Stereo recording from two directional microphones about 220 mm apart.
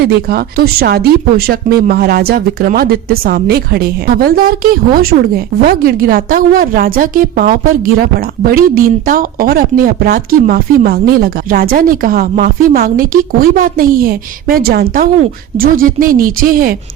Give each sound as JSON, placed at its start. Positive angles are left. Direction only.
{"t": 0.0, "sound": "speech", "side_deg": -45}